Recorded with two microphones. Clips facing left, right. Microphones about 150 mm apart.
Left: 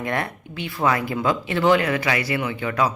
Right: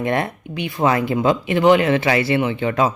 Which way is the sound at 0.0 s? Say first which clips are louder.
Right 5 dB; 20° right (ahead or behind).